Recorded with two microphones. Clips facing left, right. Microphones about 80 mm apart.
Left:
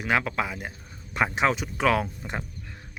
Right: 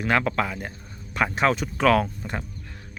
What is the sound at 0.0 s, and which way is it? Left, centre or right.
Speech, centre.